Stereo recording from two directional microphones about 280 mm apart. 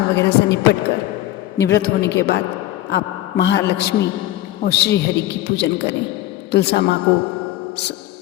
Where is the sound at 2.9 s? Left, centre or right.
Left.